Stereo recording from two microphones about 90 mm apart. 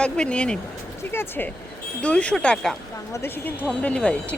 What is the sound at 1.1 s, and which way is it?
Speech, 25° left (ahead or behind).